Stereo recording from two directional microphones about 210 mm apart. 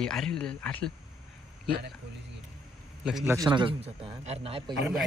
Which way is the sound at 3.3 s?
20° right (ahead or behind).